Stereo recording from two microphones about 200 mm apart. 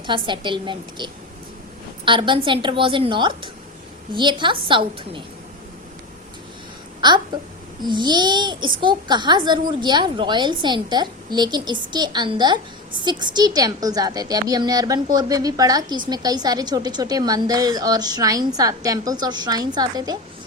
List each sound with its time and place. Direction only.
0.0 s a woman's voice: 25° right (ahead or behind)
7.0 s a woman's voice: 20° right (ahead or behind)